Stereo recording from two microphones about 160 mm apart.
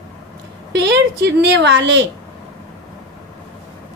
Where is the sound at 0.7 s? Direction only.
90° right.